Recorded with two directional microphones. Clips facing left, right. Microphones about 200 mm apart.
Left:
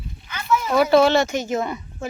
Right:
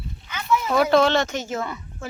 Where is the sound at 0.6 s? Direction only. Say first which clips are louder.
Left 3 dB; centre (ahead or behind); by 2.0 s 20° left (ahead or behind).